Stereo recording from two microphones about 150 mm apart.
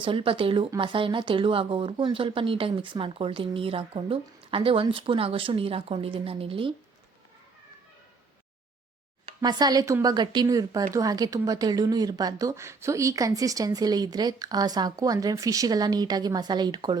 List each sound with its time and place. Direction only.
0.0 s speech: 35° right (ahead or behind)
9.4 s speech: 25° right (ahead or behind)